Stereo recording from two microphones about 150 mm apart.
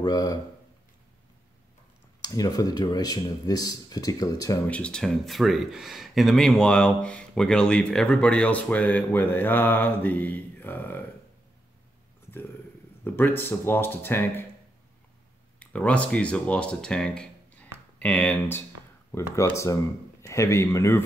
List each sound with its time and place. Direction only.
0.0 s speech: 25° left (ahead or behind)
2.2 s speech: 25° left (ahead or behind)
4.6 s speech: 10° left (ahead or behind)
13.0 s speech: 15° left (ahead or behind)
15.6 s speech: 10° left (ahead or behind)